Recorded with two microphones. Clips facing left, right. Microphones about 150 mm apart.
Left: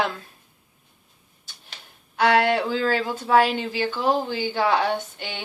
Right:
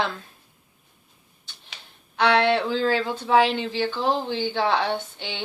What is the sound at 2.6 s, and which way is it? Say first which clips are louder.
Speech: even; 5° left (ahead or behind).